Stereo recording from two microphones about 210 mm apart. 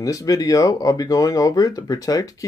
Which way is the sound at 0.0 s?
15° left (ahead or behind).